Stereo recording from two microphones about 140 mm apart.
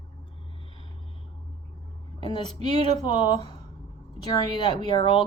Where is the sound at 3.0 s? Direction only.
35° left (ahead or behind).